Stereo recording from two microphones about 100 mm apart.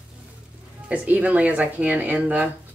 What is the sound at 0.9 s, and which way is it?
Speech, 15° right (ahead or behind).